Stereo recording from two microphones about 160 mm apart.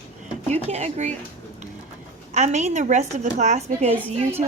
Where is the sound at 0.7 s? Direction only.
40° right (ahead or behind).